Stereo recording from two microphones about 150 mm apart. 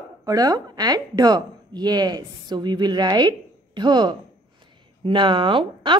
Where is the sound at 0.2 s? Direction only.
25° right (ahead or behind).